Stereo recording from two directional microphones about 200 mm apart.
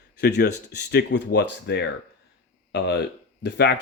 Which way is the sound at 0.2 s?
55° left (ahead or behind).